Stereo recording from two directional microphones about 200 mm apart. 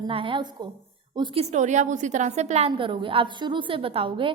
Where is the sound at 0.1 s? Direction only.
25° right (ahead or behind).